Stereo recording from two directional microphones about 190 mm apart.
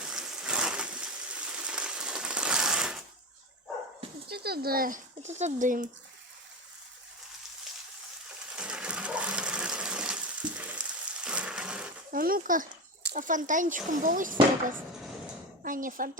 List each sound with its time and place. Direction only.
0.0 s a sound: 5° right (ahead or behind)
4.3 s speech: 55° right (ahead or behind)
8.5 s water: 5° right (ahead or behind)
12.1 s a child's voice: 50° right (ahead or behind)
15.6 s a woman's voice: 45° right (ahead or behind)